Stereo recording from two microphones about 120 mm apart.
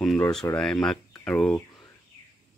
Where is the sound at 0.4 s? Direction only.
20° left (ahead or behind).